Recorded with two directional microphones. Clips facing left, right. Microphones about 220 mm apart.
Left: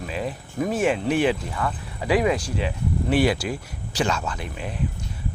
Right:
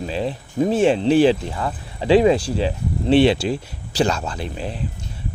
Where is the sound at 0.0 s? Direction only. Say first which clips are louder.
Right 5 dB; 30° right (ahead or behind).